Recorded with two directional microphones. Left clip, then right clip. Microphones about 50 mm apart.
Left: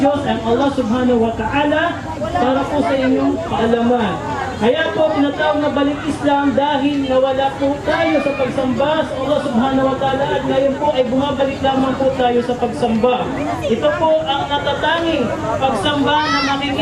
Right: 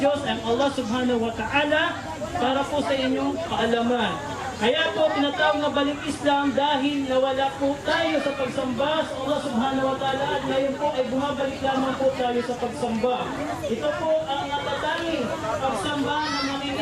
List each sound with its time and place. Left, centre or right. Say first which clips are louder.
0.0 s a man's voice: left 7 dB; right
2.4 s a man's voice: left 7 dB; centre
9.6 s speech: left 8 dB; centre
16.0 s speech: left 12 dB; centre